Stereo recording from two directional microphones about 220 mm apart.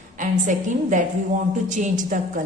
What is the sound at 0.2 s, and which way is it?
A woman's voice, 35° right (ahead or behind).